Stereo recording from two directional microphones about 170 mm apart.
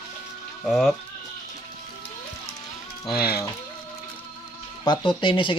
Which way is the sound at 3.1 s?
65° left (ahead or behind).